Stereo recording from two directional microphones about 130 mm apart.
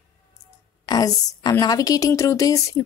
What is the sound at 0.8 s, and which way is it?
A woman's voice, 30° left (ahead or behind).